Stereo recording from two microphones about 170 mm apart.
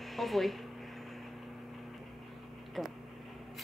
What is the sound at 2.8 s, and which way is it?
Speech, centre (ahead or behind).